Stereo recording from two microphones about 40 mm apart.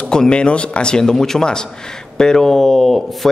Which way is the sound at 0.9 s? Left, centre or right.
Centre.